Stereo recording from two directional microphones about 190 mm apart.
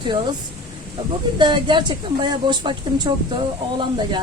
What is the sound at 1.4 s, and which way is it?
Speech, 25° right (ahead or behind).